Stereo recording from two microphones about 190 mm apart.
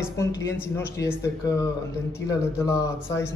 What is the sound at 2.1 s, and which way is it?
A man's voice, 15° left (ahead or behind).